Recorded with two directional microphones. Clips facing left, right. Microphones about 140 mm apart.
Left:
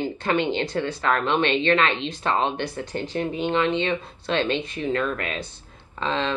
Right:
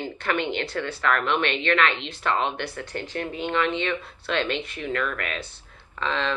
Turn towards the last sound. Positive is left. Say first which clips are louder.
# left 2 dB
turn(degrees=20)  # may be behind; listen again after turning